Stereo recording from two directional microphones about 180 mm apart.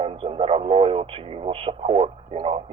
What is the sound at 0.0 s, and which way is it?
Speech, 30° right (ahead or behind).